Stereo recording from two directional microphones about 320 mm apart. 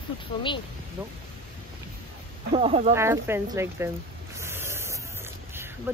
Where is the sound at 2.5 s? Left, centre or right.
Centre.